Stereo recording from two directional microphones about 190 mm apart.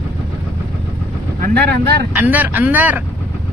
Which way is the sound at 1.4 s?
55° right (ahead or behind).